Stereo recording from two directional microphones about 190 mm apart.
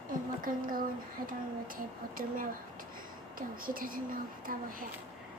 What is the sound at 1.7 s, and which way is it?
Speech, 45° right (ahead or behind).